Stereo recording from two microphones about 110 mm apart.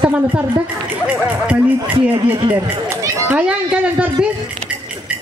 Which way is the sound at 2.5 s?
25° right (ahead or behind).